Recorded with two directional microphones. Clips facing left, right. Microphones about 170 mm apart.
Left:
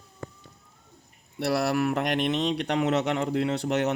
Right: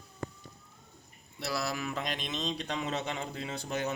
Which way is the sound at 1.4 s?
65° left (ahead or behind).